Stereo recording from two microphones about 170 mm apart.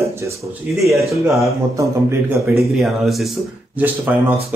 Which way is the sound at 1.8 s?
15° right (ahead or behind).